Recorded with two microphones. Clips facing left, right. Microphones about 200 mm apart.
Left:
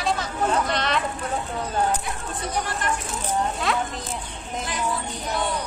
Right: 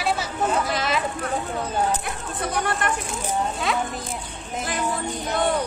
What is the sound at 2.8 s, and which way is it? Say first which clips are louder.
Speech: right 1 dB; 55° right (ahead or behind).